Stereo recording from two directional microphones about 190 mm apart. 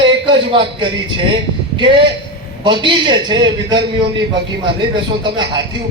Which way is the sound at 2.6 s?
25° right (ahead or behind).